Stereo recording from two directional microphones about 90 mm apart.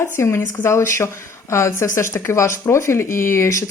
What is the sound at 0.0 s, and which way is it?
A woman's voice, 30° left (ahead or behind).